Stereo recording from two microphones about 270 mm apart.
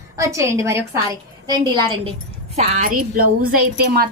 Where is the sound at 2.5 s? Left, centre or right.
Right.